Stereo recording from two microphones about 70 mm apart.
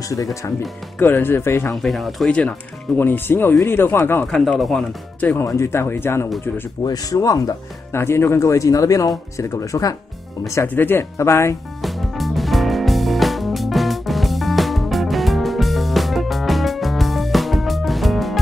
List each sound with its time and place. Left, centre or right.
0.1 s speech: left
0.9 s speech: left
1.8 s speech: centre
3.0 s speech: left
4.3 s speech: centre
5.4 s speech: left
6.8 s speech: left
7.9 s speech: left
10.7 s speech: left
11.8 s music: centre